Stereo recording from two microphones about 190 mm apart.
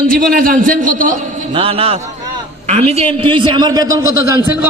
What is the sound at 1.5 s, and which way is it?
A man's voice, 30° right (ahead or behind).